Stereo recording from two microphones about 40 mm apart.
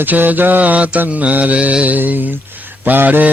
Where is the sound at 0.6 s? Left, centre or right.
Right.